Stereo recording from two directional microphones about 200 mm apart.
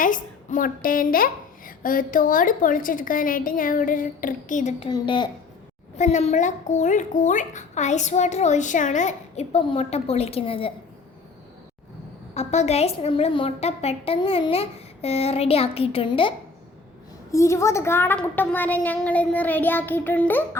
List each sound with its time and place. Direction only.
0.0 s a woman's voice: 40° left (ahead or behind)
4.9 s a woman's voice: 20° left (ahead or behind)
6.0 s a child's voice: 35° left (ahead or behind)
12.3 s a woman's voice: 35° left (ahead or behind)
17.3 s a woman's voice: 15° left (ahead or behind)